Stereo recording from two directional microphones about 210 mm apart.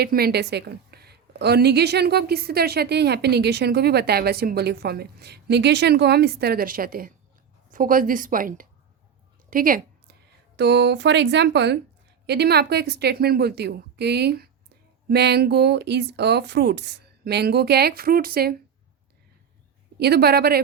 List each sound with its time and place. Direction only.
0.0 s a woman's voice: 50° right (ahead or behind)
9.5 s a sound: 40° right (ahead or behind)
10.6 s a woman's voice: 55° right (ahead or behind)
20.0 s a woman's voice: 50° right (ahead or behind)